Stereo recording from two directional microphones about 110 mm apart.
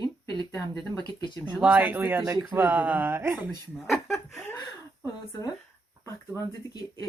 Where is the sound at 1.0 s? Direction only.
40° left (ahead or behind).